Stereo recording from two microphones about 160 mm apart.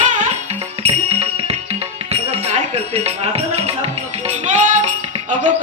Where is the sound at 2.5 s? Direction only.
40° right (ahead or behind).